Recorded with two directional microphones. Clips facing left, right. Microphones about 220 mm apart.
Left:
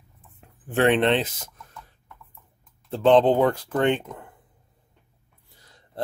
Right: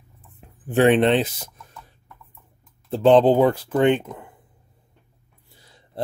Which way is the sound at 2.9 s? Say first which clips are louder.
Right 3 dB; 5° right (ahead or behind).